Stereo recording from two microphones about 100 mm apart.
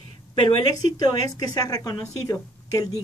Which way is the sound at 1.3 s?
40° left (ahead or behind).